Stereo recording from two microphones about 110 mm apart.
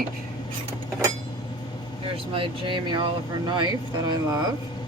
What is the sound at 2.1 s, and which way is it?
Speech, 55° right (ahead or behind).